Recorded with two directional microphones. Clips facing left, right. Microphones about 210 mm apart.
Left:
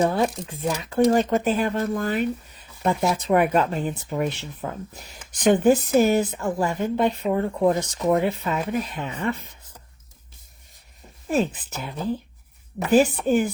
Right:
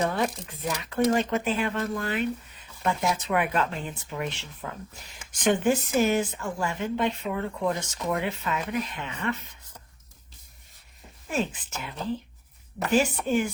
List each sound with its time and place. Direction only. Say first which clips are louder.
0.0 s speech: left 5 dB; 35° left (ahead or behind)
11.3 s speech: left 6 dB; 35° left (ahead or behind)